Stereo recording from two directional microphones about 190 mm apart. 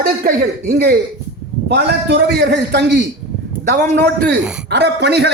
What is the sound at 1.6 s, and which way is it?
A man's voice, 55° right (ahead or behind).